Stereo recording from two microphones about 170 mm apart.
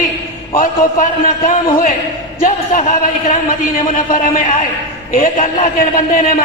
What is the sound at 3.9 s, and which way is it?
A man's voice, 50° left (ahead or behind).